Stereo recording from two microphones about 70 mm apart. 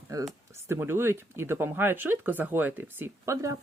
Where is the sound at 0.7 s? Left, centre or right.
Right.